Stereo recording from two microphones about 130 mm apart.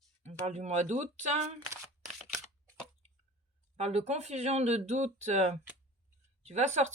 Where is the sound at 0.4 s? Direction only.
60° right (ahead or behind).